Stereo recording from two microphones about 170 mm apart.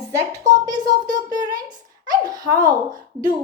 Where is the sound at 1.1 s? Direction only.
20° right (ahead or behind).